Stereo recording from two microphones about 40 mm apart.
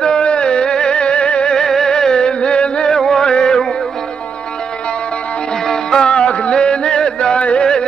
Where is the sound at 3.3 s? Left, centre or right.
Centre.